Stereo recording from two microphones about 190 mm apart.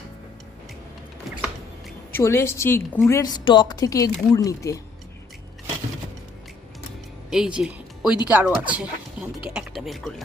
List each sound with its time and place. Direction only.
2.1 s a woman's voice: 15° left (ahead or behind)
7.3 s speech: 5° right (ahead or behind)